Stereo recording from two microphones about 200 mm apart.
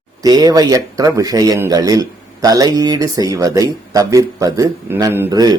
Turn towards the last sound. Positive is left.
turn(degrees=-20)  # may be behind; listen again after turning